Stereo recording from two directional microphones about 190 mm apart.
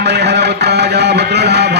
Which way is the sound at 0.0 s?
60° right (ahead or behind).